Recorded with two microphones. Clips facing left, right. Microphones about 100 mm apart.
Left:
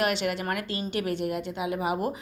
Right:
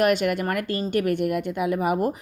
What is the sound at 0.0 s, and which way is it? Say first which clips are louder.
Speech: right 6 dB; 50° right (ahead or behind).